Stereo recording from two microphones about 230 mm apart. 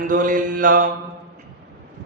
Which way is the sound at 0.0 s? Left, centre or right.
Right.